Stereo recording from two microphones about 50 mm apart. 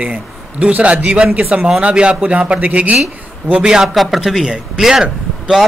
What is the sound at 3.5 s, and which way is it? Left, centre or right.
A man's voice, centre.